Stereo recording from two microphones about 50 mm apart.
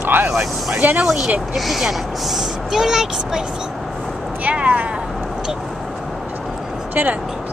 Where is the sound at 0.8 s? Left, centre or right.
Right.